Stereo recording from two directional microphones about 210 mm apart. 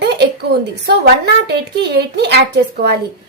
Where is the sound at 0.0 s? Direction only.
50° right (ahead or behind).